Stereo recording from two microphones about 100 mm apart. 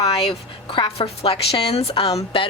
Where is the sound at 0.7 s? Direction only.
65° left (ahead or behind).